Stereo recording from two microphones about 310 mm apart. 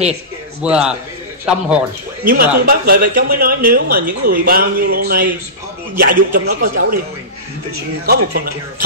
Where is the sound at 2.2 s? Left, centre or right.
Right.